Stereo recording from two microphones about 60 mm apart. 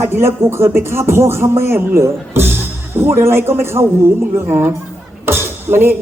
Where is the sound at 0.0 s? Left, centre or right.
Right.